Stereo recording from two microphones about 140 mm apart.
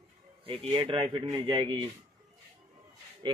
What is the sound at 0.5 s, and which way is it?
A man's voice, 40° right (ahead or behind).